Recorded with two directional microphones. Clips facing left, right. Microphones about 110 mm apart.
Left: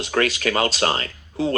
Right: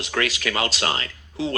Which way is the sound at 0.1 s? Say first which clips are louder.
Left 4 dB; 40° left (ahead or behind).